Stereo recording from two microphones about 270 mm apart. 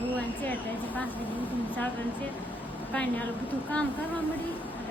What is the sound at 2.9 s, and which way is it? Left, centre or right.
Speech, centre.